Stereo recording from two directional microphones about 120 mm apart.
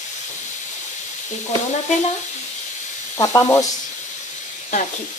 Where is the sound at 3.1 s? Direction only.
25° left (ahead or behind).